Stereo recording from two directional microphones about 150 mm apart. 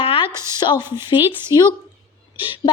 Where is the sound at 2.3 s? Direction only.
35° left (ahead or behind).